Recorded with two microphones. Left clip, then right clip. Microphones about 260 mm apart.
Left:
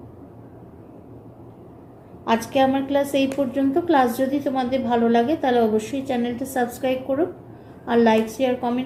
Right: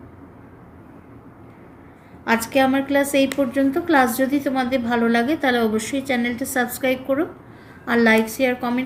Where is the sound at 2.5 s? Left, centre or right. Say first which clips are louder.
Right 1 dB; right.